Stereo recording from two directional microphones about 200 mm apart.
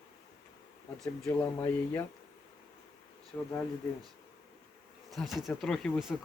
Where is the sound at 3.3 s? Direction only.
5° left (ahead or behind).